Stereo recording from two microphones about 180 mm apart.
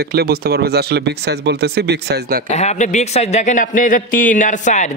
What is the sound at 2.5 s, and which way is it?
A man's voice, 40° left (ahead or behind).